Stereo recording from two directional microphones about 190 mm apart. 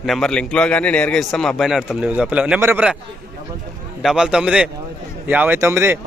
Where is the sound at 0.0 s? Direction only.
Centre (ahead or behind).